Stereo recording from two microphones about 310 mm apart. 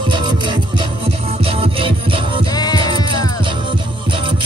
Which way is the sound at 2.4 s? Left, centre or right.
Centre.